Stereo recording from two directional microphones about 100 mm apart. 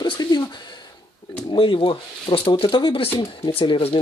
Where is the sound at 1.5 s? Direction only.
55° left (ahead or behind).